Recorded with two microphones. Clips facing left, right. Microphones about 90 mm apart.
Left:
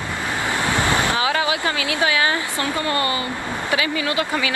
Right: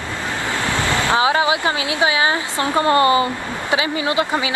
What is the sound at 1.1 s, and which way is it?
Speech, 25° right (ahead or behind).